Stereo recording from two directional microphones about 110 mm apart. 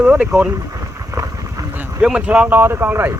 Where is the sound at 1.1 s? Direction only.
30° right (ahead or behind).